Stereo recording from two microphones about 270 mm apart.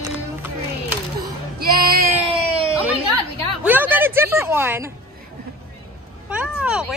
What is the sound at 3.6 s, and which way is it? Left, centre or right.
A woman's voice, centre.